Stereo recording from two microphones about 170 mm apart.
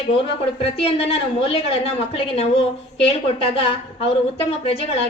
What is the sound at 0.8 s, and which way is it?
A woman's voice, 35° left (ahead or behind).